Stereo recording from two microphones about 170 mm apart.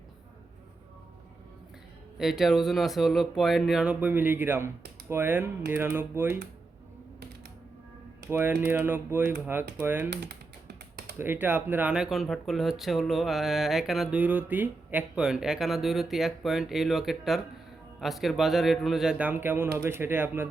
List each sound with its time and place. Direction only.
2.1 s speech: centre (ahead or behind)
8.3 s speech: 10° right (ahead or behind)
10.1 s speech: 80° right
11.2 s speech: 10° right (ahead or behind)